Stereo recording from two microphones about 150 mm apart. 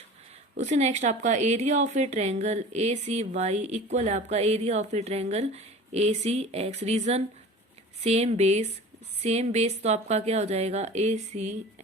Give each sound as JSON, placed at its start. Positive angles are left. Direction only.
{"t": 0.5, "sound": "speech", "side_deg": -50}